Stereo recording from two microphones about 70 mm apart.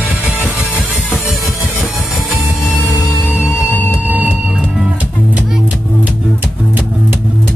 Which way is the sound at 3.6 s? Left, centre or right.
Left.